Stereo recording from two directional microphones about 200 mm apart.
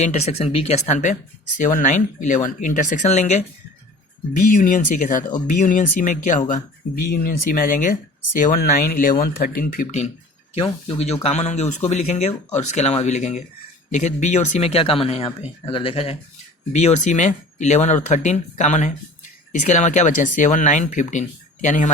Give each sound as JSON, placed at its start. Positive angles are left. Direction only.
{"t": 0.0, "sound": "speech", "side_deg": 35}
{"t": 4.5, "sound": "speech", "side_deg": 40}